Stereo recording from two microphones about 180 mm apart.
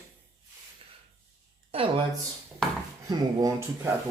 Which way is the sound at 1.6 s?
30° right (ahead or behind).